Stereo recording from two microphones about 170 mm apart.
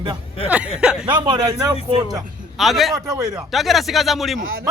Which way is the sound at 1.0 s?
30° right (ahead or behind).